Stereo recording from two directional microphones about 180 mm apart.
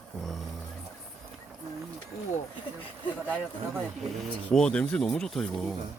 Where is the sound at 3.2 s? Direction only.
10° right (ahead or behind).